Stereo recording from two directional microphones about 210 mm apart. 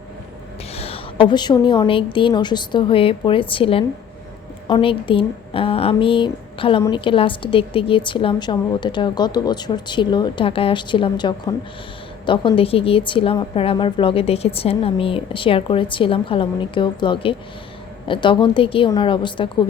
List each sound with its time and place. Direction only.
0.7 s a woman's voice: 30° left (ahead or behind)